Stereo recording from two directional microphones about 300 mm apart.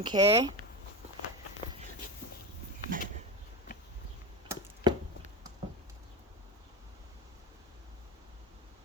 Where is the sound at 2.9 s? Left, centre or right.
Right.